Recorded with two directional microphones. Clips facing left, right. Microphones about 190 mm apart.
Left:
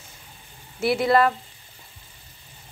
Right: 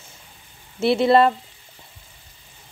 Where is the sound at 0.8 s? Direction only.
25° right (ahead or behind).